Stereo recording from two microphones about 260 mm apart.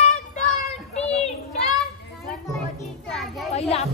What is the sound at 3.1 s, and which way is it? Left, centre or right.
Children playing, centre.